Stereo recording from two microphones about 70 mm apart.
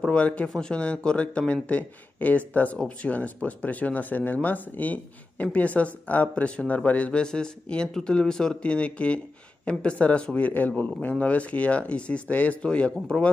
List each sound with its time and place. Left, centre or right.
0.1 s a man's voice: centre